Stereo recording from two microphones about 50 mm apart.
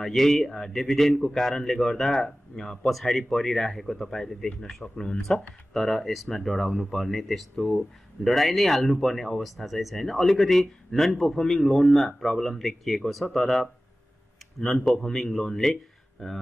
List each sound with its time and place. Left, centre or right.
0.0 s a man's voice: centre
5.7 s a man's voice: centre